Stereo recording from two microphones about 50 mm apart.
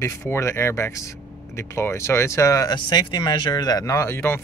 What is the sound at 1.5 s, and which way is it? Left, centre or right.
Speech, left.